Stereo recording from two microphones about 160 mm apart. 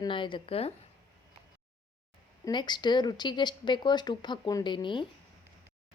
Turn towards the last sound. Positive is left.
turn(degrees=30)  # may be behind; listen again after turning